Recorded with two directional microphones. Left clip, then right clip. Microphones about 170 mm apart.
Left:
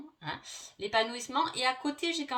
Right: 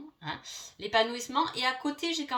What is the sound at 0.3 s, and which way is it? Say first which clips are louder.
Speech: right 1 dB; 35° left (ahead or behind).